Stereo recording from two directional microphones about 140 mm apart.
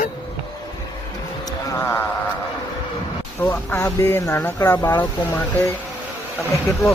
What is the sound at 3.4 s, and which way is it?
Speech, 10° left (ahead or behind).